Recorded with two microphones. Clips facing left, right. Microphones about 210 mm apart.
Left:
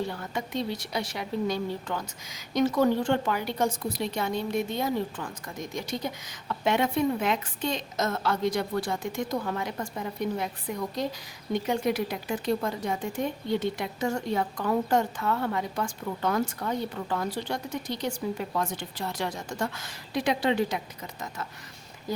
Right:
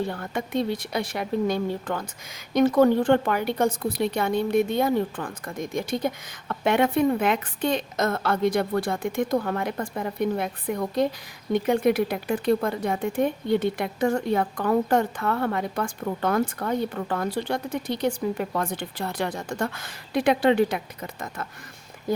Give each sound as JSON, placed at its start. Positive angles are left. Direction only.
{"t": 0.1, "sound": "speech", "side_deg": -55}